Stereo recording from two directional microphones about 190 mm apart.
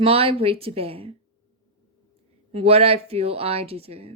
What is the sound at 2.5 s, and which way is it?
Speech, 30° right (ahead or behind).